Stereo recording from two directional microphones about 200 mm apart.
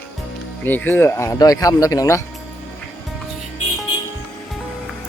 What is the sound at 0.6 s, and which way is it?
Speech, 10° left (ahead or behind).